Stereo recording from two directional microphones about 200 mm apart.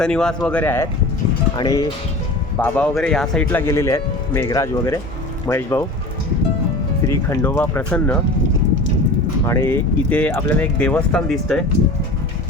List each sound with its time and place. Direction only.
0.0 s speech: 5° left (ahead or behind); by 1.9 s 20° left (ahead or behind)
2.6 s speech: 5° left (ahead or behind)
7.1 s speech: 15° left (ahead or behind)
9.5 s speech: 10° left (ahead or behind)